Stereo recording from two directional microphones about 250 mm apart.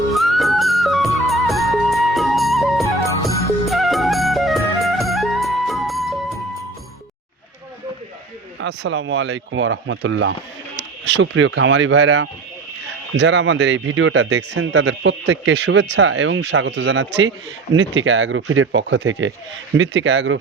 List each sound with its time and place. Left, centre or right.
0.1 s music: centre
8.6 s speech: right